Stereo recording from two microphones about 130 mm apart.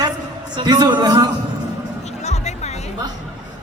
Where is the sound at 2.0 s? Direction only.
60° left (ahead or behind).